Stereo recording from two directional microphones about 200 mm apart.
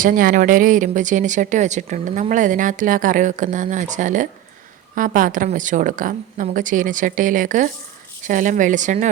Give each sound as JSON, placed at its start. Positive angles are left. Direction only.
{"t": 0.0, "sound": "speech", "side_deg": -45}